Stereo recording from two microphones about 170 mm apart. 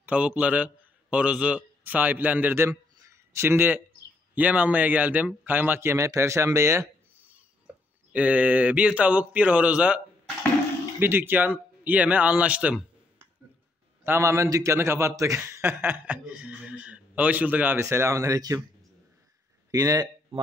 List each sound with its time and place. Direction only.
0.0 s a man's voice: 5° right (ahead or behind)
19.7 s speech: 20° right (ahead or behind)